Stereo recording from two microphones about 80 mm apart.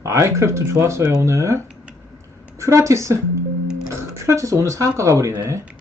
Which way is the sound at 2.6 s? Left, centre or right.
Right.